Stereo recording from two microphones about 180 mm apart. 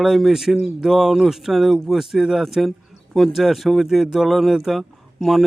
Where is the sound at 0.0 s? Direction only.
Centre (ahead or behind).